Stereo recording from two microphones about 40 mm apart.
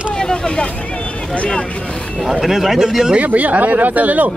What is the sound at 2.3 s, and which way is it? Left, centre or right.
Speech, centre.